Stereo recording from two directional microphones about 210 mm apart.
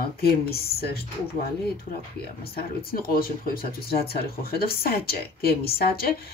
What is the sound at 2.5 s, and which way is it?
Speech, 45° left (ahead or behind).